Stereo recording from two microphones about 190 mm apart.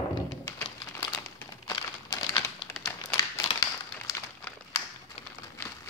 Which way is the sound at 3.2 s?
20° left (ahead or behind).